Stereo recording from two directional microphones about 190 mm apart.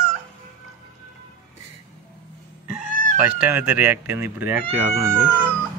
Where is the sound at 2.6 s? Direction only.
5° right (ahead or behind).